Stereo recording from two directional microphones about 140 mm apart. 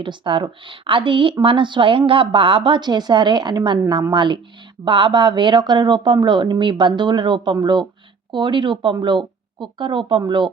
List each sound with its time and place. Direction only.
0.0 s a woman's voice: 35° right (ahead or behind)